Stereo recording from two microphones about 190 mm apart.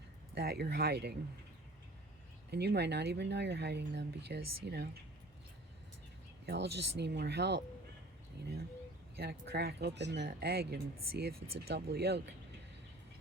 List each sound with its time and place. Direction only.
0.3 s speech: 55° right (ahead or behind)
2.5 s speech: 60° right (ahead or behind)
6.4 s speech: 60° right (ahead or behind)
9.1 s speech: 60° right (ahead or behind)